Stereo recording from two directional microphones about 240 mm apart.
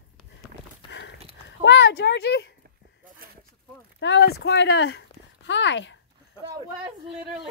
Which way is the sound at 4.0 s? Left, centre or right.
Left.